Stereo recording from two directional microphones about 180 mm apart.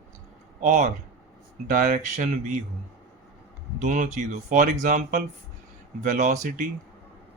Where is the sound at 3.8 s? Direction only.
45° right (ahead or behind).